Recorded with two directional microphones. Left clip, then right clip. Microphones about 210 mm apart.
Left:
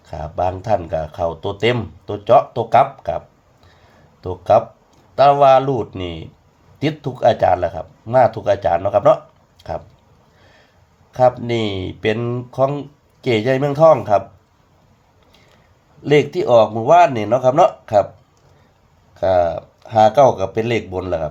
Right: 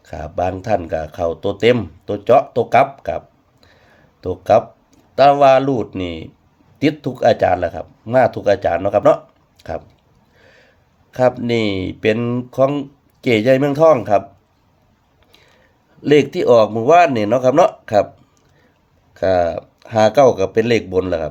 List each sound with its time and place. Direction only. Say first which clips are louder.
0.0 s speech: even; 30° right (ahead or behind)
4.2 s speech: right 1 dB; 30° right (ahead or behind)
11.1 s speech: even; 30° right (ahead or behind)
16.0 s speech: right 2 dB; 30° right (ahead or behind)
19.1 s speech: even; 30° right (ahead or behind)